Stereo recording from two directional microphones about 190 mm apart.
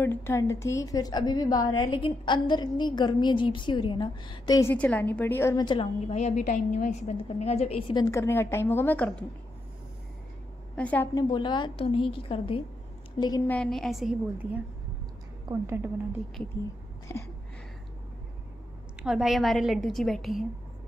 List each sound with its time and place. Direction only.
0.0 s a woman's voice: 10° left (ahead or behind)
4.7 s a woman's voice: 10° left (ahead or behind)
5.9 s a woman's voice: 35° left (ahead or behind)
8.0 s a woman's voice: 15° left (ahead or behind)
10.8 s a woman's voice: 10° left (ahead or behind)
11.1 s a woman's voice: 25° left (ahead or behind)
13.5 s a woman's voice: 5° left (ahead or behind)
15.6 s a woman's voice: 10° right (ahead or behind)
17.1 s a woman's voice: 15° left (ahead or behind)
19.0 s a woman's voice: centre (ahead or behind)